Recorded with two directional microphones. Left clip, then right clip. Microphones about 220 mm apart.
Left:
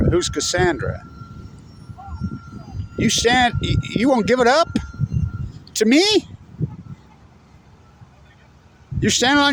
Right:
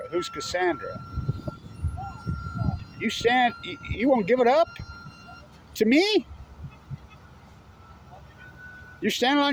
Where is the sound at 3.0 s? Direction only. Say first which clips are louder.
Left 6 dB; 50° left (ahead or behind).